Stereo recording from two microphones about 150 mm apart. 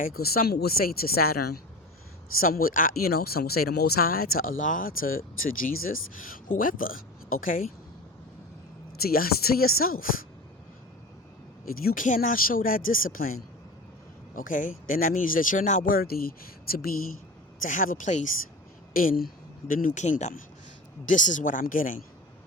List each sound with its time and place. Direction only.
0.0 s speech: 85° left
2.4 s speech: 75° left (ahead or behind)
9.0 s speech: 80° left
11.8 s speech: 70° left (ahead or behind)
14.3 s speech: 65° left (ahead or behind); by 16.8 s 80° left
17.6 s speech: 65° left (ahead or behind)
18.9 s speech: 75° left (ahead or behind)